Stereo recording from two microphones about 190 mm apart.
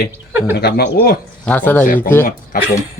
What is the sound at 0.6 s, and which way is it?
Speech, 55° left (ahead or behind).